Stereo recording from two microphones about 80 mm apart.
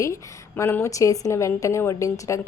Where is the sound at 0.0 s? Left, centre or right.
Left.